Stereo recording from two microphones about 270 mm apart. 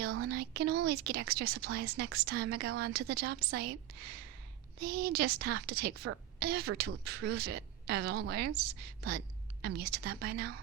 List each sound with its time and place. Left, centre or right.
0.0 s a sound: right
0.3 s a woman's voice: right
4.8 s a woman's voice: right